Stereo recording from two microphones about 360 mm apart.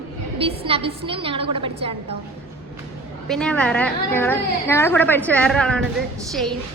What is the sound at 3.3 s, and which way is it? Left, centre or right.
A woman's voice, centre.